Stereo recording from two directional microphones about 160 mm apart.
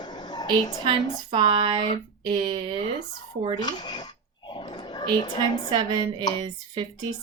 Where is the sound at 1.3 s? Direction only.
30° right (ahead or behind).